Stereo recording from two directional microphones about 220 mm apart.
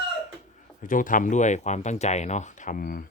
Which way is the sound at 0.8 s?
35° left (ahead or behind).